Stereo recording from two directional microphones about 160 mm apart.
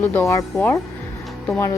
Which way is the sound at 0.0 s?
15° left (ahead or behind).